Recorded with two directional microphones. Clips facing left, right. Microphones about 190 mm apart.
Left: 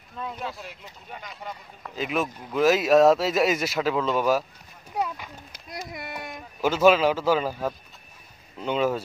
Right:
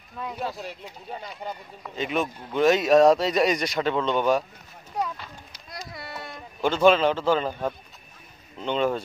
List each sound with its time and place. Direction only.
1.1 s speech: 30° right (ahead or behind)
1.8 s speech: centre (ahead or behind)